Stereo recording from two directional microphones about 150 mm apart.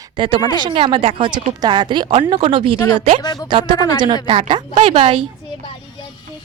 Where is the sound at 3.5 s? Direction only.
30° right (ahead or behind).